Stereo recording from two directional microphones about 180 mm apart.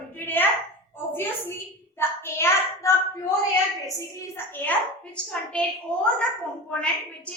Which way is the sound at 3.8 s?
15° left (ahead or behind).